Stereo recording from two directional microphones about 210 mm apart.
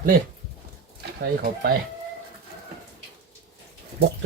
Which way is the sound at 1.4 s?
45° right (ahead or behind).